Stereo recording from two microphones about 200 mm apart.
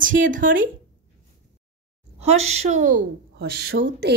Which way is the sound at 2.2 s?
30° right (ahead or behind).